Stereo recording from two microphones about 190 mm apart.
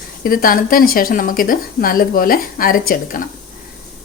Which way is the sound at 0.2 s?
50° left (ahead or behind).